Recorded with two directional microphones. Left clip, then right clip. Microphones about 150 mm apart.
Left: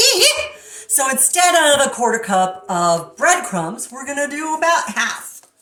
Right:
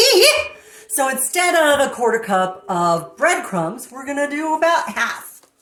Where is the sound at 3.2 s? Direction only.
30° right (ahead or behind).